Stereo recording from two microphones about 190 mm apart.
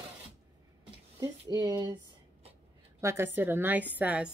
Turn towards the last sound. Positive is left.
turn(degrees=-5)  # may be behind; listen again after turning